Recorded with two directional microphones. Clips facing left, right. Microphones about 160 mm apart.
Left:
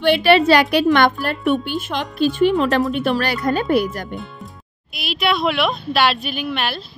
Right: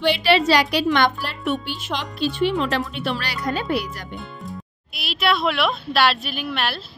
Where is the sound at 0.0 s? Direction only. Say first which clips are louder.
Left 4 dB; 55° left (ahead or behind).